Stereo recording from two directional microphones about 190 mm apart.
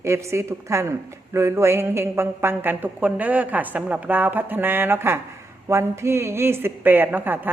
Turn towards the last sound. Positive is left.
turn(degrees=-10)  # may be behind; listen again after turning